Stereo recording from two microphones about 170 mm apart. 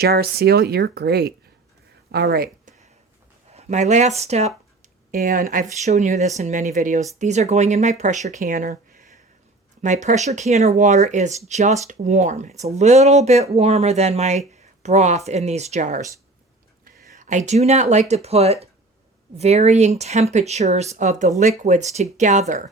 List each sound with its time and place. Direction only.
0.0 s speech: 65° right (ahead or behind)
3.5 s speech: 40° right (ahead or behind)
5.1 s speech: 55° right (ahead or behind)
16.8 s a sound: 50° right (ahead or behind)
18.1 s speech: 40° right (ahead or behind)